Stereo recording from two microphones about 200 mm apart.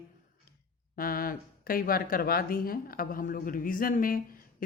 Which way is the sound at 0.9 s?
45° left (ahead or behind).